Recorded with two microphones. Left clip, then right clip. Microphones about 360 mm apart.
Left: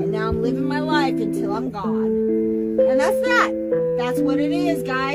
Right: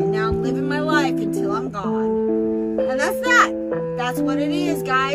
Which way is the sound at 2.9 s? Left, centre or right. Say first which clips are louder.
Right 3 dB; right.